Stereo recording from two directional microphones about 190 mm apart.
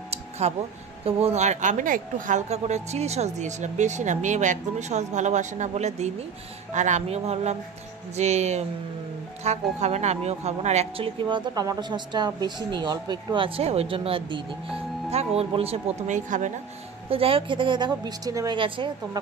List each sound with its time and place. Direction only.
0.1 s music: 35° right (ahead or behind)
1.0 s a woman's voice: 35° right (ahead or behind)
17.1 s a woman's voice: 30° right (ahead or behind)